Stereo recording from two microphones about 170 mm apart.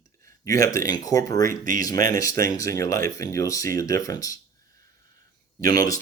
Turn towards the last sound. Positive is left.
turn(degrees=20)  # may be behind; listen again after turning